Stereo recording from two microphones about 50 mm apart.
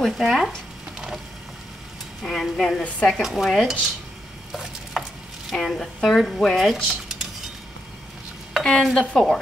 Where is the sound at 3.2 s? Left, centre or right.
Centre.